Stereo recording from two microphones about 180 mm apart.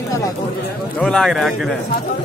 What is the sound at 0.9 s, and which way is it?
Speech, 5° left (ahead or behind).